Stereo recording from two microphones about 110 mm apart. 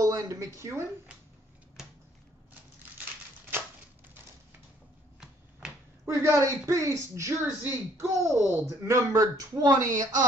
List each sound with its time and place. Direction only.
0.0 s a woman's voice: 30° right (ahead or behind)
6.0 s speech: 25° right (ahead or behind)